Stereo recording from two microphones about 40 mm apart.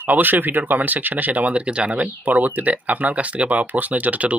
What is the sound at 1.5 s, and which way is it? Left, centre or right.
Speech, right.